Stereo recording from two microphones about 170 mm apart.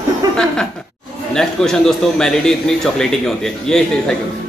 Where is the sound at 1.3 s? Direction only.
5° left (ahead or behind).